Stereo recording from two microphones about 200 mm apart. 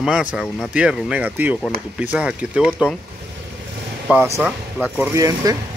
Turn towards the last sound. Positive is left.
turn(degrees=-15)  # may be behind; listen again after turning